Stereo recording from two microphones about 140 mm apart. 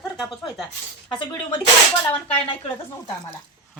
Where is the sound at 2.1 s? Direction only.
40° left (ahead or behind).